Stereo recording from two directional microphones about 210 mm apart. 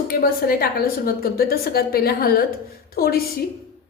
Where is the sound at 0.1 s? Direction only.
45° left (ahead or behind).